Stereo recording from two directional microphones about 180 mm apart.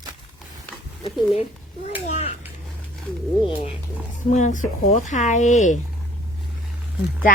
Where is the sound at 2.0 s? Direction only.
40° left (ahead or behind).